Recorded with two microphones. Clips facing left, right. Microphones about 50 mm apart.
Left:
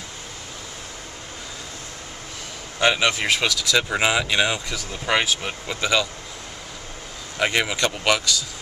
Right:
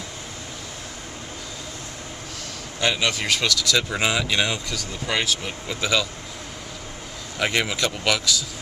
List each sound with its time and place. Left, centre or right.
2.8 s speech: centre
5.7 s speech: centre
7.3 s speech: centre